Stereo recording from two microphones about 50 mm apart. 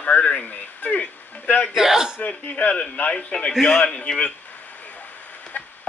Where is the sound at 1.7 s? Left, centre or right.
Centre.